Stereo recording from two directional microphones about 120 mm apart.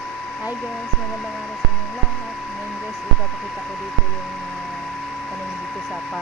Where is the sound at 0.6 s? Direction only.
Centre (ahead or behind).